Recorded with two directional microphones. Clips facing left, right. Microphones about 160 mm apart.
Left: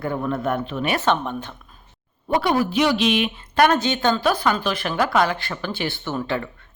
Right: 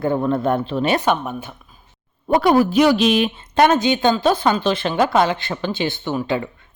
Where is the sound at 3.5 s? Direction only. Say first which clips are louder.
Right 3 dB; 20° right (ahead or behind).